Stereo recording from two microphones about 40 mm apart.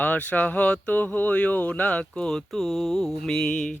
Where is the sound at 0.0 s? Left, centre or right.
Left.